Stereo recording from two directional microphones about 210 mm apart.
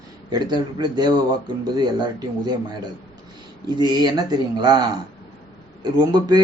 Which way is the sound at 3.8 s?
20° right (ahead or behind).